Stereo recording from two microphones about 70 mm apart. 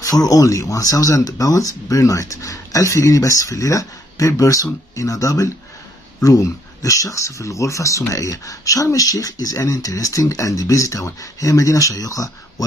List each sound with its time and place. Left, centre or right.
0.0 s speech: left